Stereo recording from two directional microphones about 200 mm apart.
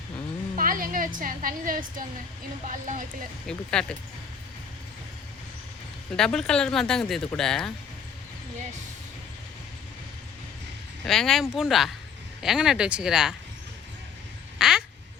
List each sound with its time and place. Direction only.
0.5 s a woman's voice: 45° right (ahead or behind)
3.4 s speech: 5° left (ahead or behind)
6.1 s speech: 5° left (ahead or behind)
11.0 s speech: centre (ahead or behind)
14.6 s quack: 5° right (ahead or behind)